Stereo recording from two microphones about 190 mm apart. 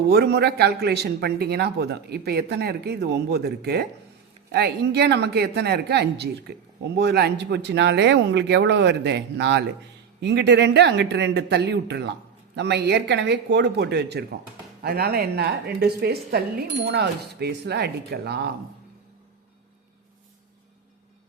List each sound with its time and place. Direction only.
0.1 s a woman's voice: 60° right (ahead or behind)